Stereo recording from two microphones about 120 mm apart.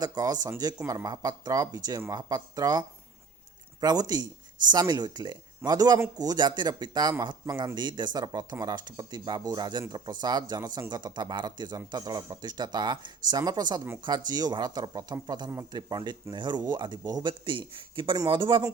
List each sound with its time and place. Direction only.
0.0 s speech: 30° right (ahead or behind)